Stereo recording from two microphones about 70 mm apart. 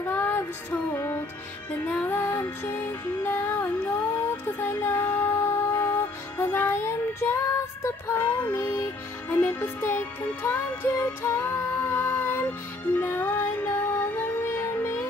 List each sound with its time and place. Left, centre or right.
0.0 s music: left
8.5 s music: left
9.3 s music: left